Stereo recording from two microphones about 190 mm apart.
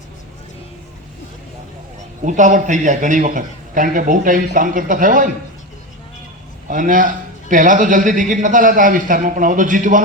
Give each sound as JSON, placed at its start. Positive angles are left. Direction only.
{"t": 2.2, "sound": "a man's voice", "side_deg": -40}
{"t": 6.7, "sound": "a man's voice", "side_deg": -45}